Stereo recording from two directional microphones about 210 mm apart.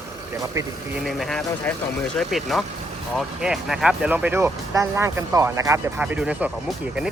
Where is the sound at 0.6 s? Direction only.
15° right (ahead or behind).